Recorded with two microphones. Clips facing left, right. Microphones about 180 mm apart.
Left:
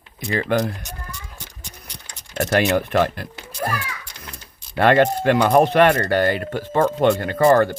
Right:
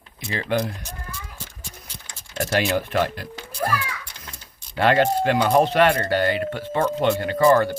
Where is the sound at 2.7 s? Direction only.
55° left (ahead or behind).